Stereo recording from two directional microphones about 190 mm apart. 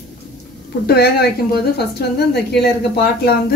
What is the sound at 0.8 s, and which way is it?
A woman's voice, 55° left (ahead or behind).